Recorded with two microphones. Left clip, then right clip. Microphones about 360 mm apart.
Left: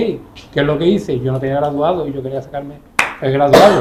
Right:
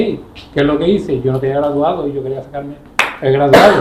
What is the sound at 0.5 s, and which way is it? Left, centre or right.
Speech, left.